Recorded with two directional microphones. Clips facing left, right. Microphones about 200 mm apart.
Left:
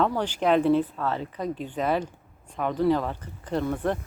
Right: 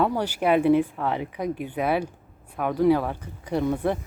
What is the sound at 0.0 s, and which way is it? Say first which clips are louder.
Speech: right 1 dB; 10° right (ahead or behind).